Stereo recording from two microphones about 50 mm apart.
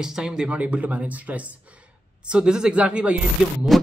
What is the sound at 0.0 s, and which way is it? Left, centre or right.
Speech, centre.